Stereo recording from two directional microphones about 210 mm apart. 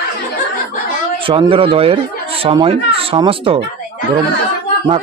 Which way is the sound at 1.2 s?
25° right (ahead or behind).